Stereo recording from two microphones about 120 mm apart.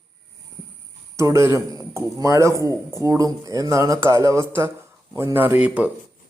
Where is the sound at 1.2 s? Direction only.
25° right (ahead or behind).